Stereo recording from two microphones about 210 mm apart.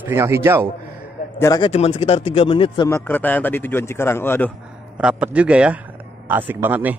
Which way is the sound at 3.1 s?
10° left (ahead or behind).